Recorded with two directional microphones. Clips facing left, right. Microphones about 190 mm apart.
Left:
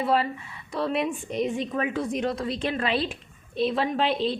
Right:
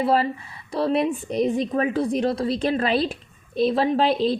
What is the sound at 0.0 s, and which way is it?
A woman's voice, 40° right (ahead or behind).